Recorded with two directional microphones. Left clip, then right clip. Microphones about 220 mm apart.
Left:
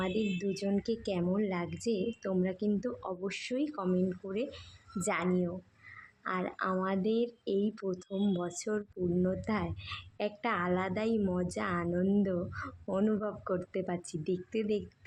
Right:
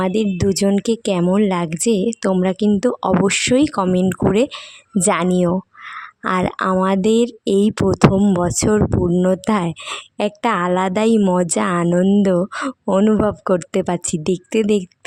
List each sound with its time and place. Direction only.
0.0 s speech: 50° right (ahead or behind)